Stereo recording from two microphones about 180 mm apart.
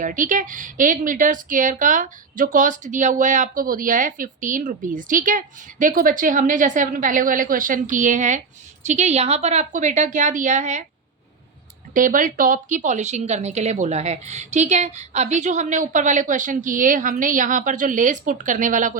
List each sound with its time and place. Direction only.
0.0 s a woman's voice: 45° right (ahead or behind)
11.9 s a woman's voice: 45° right (ahead or behind)